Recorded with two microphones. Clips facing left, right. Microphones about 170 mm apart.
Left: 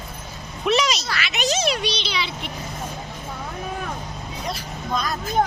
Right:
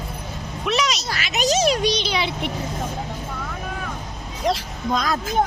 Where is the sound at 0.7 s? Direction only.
Centre (ahead or behind).